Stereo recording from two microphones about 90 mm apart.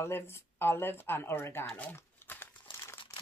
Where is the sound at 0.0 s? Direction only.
30° left (ahead or behind).